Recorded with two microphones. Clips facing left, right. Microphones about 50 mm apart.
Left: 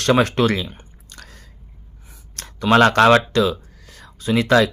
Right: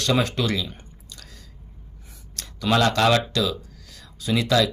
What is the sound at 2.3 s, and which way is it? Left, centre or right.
Speech, left.